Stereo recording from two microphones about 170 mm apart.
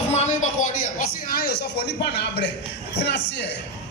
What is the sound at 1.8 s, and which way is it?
Speech, 70° left (ahead or behind).